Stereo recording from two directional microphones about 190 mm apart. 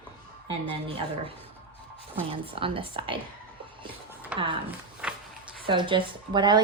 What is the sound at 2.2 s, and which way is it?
Speech, 30° right (ahead or behind).